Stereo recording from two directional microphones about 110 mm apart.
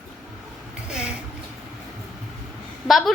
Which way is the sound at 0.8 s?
10° right (ahead or behind).